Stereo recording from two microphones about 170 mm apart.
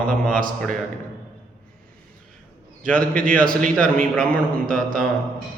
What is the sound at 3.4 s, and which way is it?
Speech, 55° right (ahead or behind).